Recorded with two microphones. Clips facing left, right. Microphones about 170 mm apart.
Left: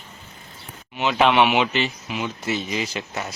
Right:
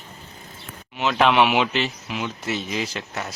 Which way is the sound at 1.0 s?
Centre (ahead or behind).